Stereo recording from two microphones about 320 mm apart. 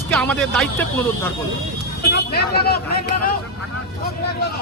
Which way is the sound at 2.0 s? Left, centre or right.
Left.